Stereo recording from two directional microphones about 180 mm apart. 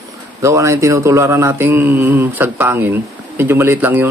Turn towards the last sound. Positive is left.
turn(degrees=-10)  # may be behind; listen again after turning